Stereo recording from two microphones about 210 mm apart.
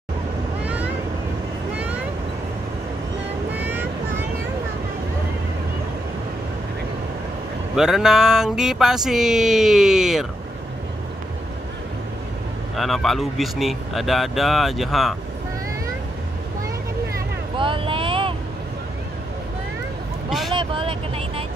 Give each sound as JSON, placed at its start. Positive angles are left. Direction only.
{"t": 3.5, "sound": "vehicle", "side_deg": -10}
{"t": 7.7, "sound": "speech", "side_deg": -5}
{"t": 12.7, "sound": "speech", "side_deg": 0}
{"t": 17.6, "sound": "a sound", "side_deg": -25}
{"t": 20.2, "sound": "vehicle", "side_deg": 0}
{"t": 20.5, "sound": "vehicle", "side_deg": -25}